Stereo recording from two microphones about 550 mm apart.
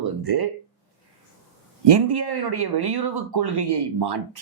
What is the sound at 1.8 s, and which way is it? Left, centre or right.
Speech, right.